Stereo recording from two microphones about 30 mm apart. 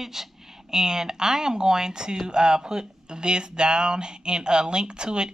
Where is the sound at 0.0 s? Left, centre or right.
Centre.